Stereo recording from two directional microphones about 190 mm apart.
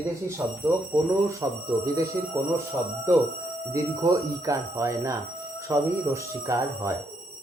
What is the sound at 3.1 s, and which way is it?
Speech, 15° right (ahead or behind).